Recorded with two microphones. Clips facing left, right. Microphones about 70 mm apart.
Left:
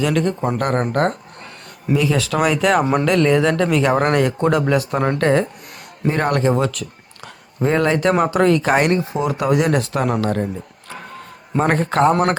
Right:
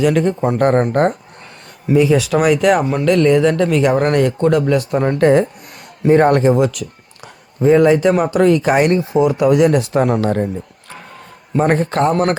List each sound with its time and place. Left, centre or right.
0.0 s a man's voice: centre
5.1 s speech: centre
6.1 s speech: right
6.5 s a man's voice: centre
9.8 s speech: right
11.5 s a man's voice: centre